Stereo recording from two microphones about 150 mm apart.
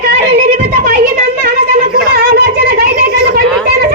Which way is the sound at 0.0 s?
75° right (ahead or behind).